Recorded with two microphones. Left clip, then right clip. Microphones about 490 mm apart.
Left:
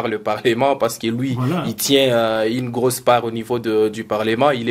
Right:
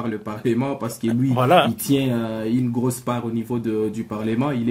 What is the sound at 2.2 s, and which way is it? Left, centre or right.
Speech, left.